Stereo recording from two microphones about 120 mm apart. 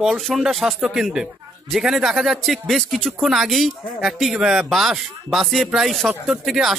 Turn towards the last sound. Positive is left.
turn(degrees=0)  # may be behind; listen again after turning